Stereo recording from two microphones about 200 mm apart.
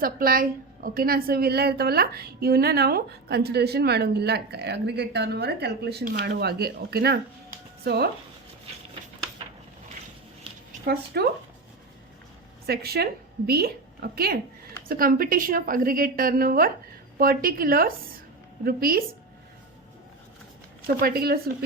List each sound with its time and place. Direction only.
0.0 s a woman's voice: 45° right (ahead or behind)
10.7 s speech: 50° right (ahead or behind)
12.6 s a woman's voice: 50° right (ahead or behind)
21.0 s a woman's voice: 50° right (ahead or behind)